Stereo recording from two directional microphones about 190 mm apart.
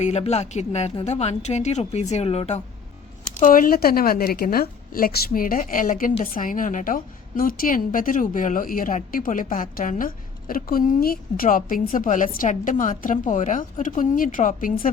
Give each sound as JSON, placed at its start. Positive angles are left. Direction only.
{"t": 0.0, "sound": "a woman's voice", "side_deg": 35}
{"t": 3.4, "sound": "a woman's voice", "side_deg": 45}